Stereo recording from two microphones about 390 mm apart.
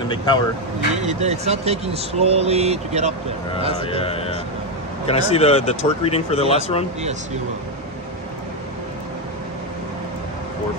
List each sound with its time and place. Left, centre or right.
0.1 s speech: centre
1.0 s speech: centre
3.9 s speech: centre